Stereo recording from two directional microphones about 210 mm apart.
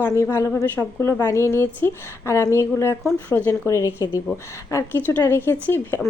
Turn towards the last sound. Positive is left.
turn(degrees=10)  # may be behind; listen again after turning